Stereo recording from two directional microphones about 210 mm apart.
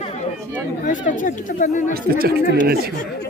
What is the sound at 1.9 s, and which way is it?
Speech, 45° right (ahead or behind).